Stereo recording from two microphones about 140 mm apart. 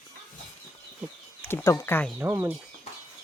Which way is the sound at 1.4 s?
15° left (ahead or behind).